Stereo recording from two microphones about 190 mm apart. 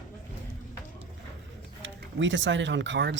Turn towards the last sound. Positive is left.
turn(degrees=-65)  # may be behind; listen again after turning